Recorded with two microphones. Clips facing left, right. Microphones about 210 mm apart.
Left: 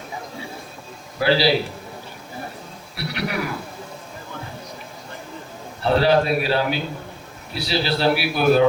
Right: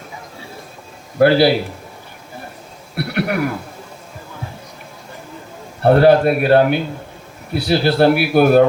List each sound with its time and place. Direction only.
1.2 s a man's voice: 55° right (ahead or behind)
2.9 s speech: 55° right (ahead or behind)
5.8 s a man's voice: 55° right (ahead or behind)